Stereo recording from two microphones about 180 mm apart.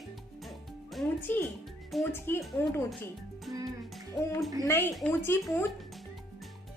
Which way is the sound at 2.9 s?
Centre (ahead or behind).